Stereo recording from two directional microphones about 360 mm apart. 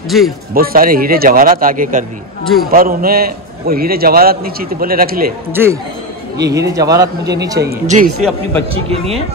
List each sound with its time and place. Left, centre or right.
0.1 s a man's voice: centre
0.6 s a man's voice: right
2.4 s a man's voice: centre
2.7 s a man's voice: right
5.5 s a man's voice: centre